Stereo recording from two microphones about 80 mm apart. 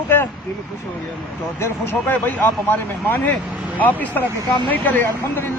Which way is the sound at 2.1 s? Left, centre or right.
Left.